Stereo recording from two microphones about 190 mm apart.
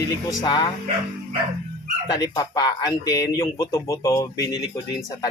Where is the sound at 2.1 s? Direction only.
20° left (ahead or behind).